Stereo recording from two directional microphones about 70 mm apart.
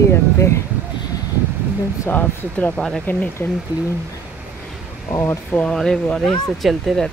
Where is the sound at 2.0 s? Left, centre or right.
Left.